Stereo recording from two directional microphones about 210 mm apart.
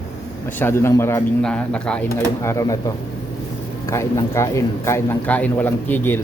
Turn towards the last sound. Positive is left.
turn(degrees=10)  # may be behind; listen again after turning